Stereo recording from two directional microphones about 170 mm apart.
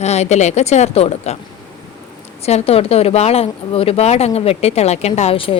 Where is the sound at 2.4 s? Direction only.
40° left (ahead or behind).